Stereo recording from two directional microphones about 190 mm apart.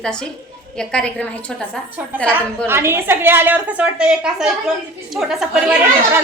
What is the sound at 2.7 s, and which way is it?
A woman's voice, 15° right (ahead or behind).